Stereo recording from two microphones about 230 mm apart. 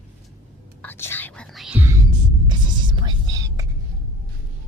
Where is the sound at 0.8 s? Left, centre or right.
Centre.